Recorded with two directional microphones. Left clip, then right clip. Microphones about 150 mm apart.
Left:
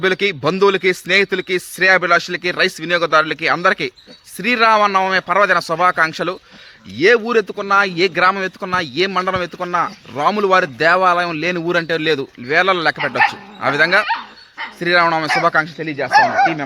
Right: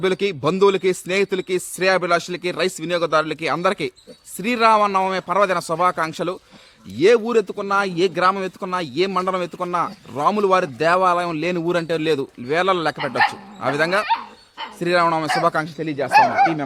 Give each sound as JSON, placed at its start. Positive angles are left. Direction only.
{"t": 0.0, "sound": "speech", "side_deg": 0}
{"t": 14.1, "sound": "dog", "side_deg": -65}
{"t": 14.8, "sound": "speech", "side_deg": 0}
{"t": 16.1, "sound": "speech", "side_deg": -50}